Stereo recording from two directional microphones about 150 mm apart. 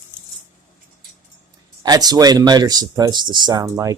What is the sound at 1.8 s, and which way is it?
Speech, 25° right (ahead or behind).